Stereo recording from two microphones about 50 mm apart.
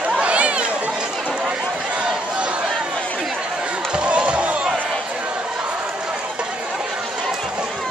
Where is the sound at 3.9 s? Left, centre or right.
Right.